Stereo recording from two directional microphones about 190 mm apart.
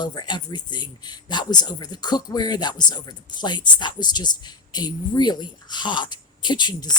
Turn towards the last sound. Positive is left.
turn(degrees=20)  # may be behind; listen again after turning